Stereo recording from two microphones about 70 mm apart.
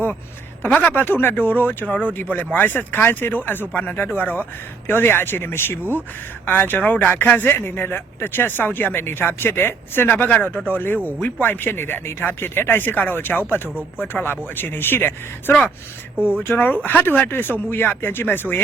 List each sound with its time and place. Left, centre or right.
0.6 s speech: left
16.1 s speech: centre
16.4 s speech: left